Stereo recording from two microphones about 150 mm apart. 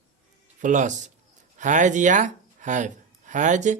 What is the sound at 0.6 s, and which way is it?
Speech, 55° right (ahead or behind).